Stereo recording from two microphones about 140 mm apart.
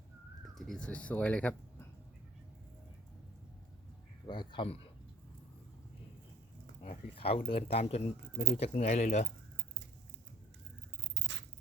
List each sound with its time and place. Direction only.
0.4 s speech: centre (ahead or behind)
4.3 s a man's voice: 35° left (ahead or behind)
7.2 s speech: 45° left (ahead or behind); by 9.2 s 60° left (ahead or behind)